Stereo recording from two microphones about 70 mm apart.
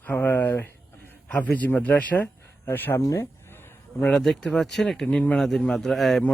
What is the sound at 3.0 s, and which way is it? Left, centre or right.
Speech, left.